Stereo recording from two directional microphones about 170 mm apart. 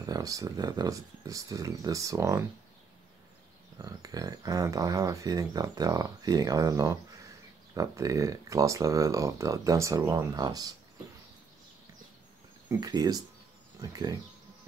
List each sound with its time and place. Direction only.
0.0 s speech: 20° right (ahead or behind)
3.7 s speech: 20° right (ahead or behind)
12.6 s speech: 25° right (ahead or behind)